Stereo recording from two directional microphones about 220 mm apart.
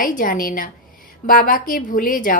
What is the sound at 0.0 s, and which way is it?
A woman's voice, 35° left (ahead or behind).